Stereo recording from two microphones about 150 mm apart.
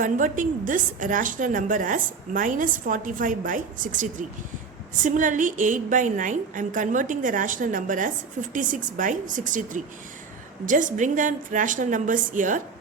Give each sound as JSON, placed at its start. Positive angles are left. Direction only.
{"t": 0.0, "sound": "a woman's voice", "side_deg": -60}